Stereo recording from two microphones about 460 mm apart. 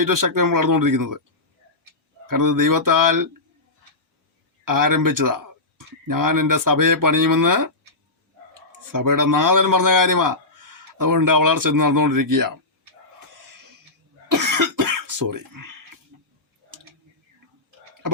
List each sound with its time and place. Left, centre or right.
0.0 s a man's voice: right
2.2 s a man's voice: right
4.6 s speech: right
8.9 s a man's voice: right
14.3 s cough: right